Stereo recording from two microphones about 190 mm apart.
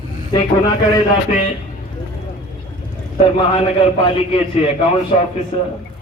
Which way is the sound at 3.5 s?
30° left (ahead or behind).